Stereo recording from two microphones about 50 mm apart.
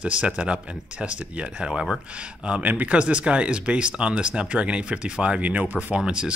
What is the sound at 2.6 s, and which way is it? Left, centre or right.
Speech, right.